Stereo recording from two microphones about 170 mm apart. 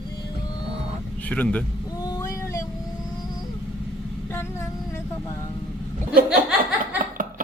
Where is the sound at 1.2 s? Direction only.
10° left (ahead or behind).